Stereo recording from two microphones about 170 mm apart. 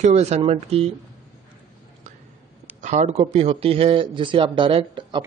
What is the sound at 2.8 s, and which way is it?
A man's voice, 45° right (ahead or behind).